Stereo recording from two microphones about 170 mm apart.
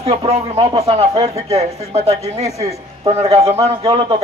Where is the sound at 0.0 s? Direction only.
35° right (ahead or behind).